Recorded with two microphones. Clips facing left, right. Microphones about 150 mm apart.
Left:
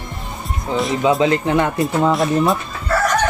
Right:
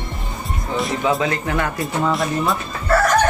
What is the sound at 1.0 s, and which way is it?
Speech, 25° left (ahead or behind).